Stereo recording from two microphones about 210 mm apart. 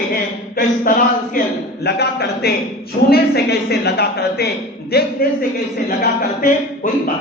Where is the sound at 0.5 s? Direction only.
40° left (ahead or behind).